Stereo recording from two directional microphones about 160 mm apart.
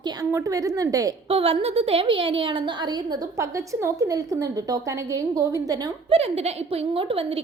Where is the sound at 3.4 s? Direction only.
20° right (ahead or behind).